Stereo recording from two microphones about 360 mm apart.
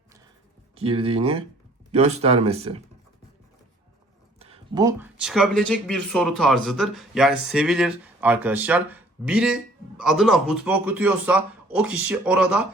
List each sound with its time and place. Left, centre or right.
0.8 s speech: centre
4.4 s speech: centre